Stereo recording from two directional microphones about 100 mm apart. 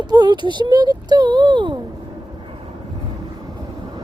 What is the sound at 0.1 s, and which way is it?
Speech, 45° right (ahead or behind).